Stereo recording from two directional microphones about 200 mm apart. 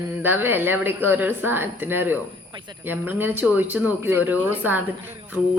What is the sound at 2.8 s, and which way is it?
A woman's voice, 10° right (ahead or behind).